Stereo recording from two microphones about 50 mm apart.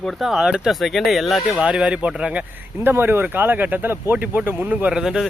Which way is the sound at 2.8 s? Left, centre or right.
Right.